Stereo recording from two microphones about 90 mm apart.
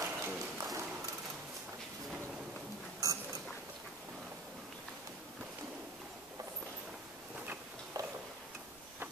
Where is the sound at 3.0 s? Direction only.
40° right (ahead or behind).